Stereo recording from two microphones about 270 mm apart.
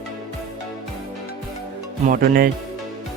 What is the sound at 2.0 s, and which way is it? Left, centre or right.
Music, right.